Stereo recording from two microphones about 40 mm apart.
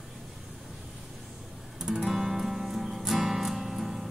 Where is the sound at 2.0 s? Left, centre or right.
Centre.